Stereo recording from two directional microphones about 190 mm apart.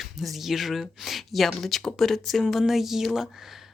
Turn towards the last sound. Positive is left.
turn(degrees=0)  # may be behind; listen again after turning